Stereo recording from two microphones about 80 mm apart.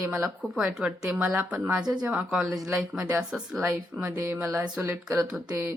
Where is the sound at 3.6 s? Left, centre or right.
Right.